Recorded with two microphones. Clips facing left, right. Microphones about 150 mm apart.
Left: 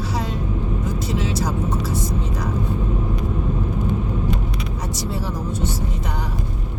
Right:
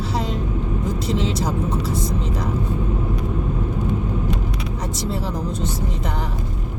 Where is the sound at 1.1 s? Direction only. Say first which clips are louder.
Right 2 dB; 25° right (ahead or behind).